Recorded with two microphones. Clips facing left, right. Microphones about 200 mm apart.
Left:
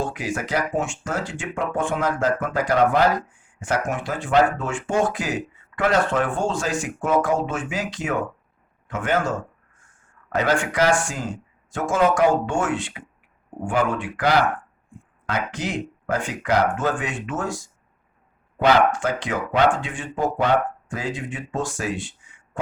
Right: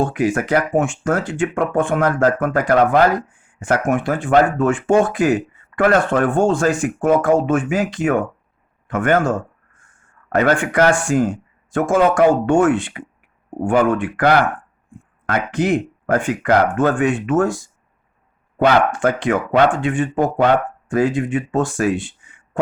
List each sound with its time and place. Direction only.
0.0 s speech: 55° right (ahead or behind)
18.6 s speech: 55° right (ahead or behind)